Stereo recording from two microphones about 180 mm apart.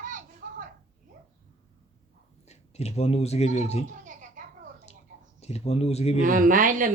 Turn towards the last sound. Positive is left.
turn(degrees=-50)  # may be behind; listen again after turning